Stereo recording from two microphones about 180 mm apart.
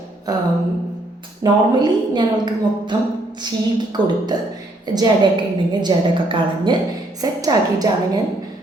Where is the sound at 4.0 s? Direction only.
25° right (ahead or behind).